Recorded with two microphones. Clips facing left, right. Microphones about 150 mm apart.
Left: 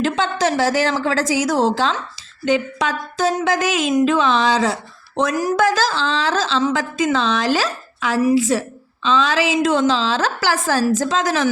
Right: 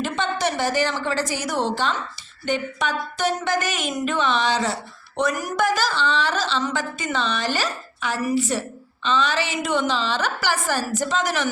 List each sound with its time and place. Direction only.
0.0 s a woman's voice: 90° left